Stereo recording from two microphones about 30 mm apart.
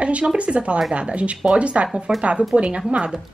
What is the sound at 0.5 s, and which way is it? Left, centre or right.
A woman's voice, right.